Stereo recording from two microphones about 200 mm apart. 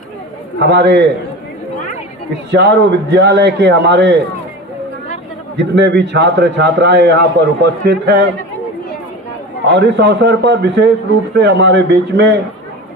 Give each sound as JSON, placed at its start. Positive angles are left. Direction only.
{"t": 0.7, "sound": "a man's voice", "side_deg": -60}
{"t": 2.5, "sound": "a man's voice", "side_deg": -60}
{"t": 5.7, "sound": "a man's voice", "side_deg": -60}
{"t": 9.7, "sound": "a man's voice", "side_deg": -60}